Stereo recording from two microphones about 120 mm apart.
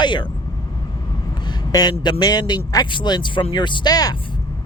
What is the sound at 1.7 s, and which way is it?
A man's voice, 30° left (ahead or behind).